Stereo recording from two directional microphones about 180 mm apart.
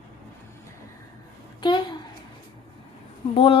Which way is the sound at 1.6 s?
25° left (ahead or behind).